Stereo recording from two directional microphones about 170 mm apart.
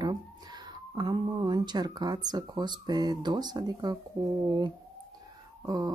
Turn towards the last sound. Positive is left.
turn(degrees=-25)  # may be behind; listen again after turning